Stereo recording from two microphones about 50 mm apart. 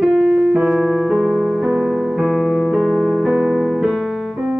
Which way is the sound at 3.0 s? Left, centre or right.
Centre.